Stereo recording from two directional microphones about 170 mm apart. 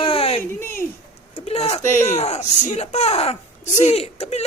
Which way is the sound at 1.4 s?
40° left (ahead or behind).